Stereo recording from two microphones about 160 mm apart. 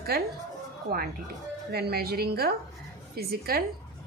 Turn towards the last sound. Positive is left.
turn(degrees=-70)  # may be behind; listen again after turning